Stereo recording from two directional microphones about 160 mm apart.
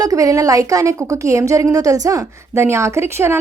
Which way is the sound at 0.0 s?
20° right (ahead or behind).